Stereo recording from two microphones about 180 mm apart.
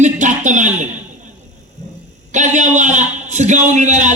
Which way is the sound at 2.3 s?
40° right (ahead or behind).